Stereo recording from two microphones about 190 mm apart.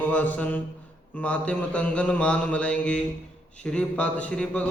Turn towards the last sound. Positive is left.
turn(degrees=5)  # may be behind; listen again after turning